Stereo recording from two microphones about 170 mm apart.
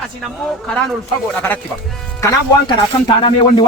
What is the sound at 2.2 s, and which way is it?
Speech, 20° left (ahead or behind).